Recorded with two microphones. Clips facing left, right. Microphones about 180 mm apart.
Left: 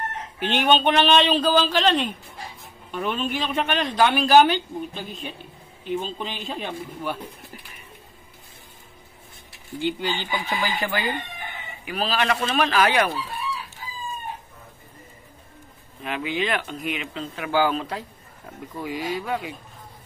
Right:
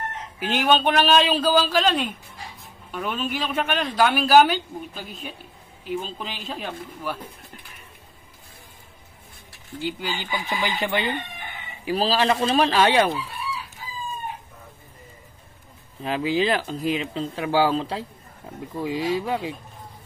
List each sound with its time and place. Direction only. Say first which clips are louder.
0.4 s speech: even; centre (ahead or behind)
9.8 s speech: left 3 dB; 5° right (ahead or behind)
10.4 s speech: even; 20° right (ahead or behind)
16.0 s speech: right 4 dB; 30° right (ahead or behind)